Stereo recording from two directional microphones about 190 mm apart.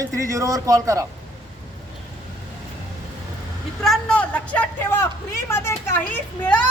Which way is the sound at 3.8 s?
5° left (ahead or behind).